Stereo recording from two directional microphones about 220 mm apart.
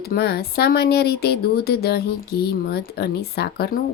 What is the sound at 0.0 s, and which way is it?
Speech, 45° left (ahead or behind).